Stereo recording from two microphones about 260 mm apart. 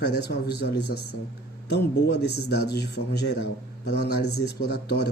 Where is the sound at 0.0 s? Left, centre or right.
Left.